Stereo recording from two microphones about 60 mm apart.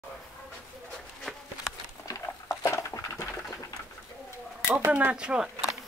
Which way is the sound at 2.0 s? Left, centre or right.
Left.